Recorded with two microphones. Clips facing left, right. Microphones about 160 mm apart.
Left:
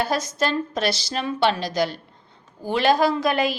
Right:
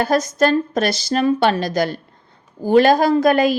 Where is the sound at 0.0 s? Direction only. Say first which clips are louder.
Right 7 dB; 45° right (ahead or behind).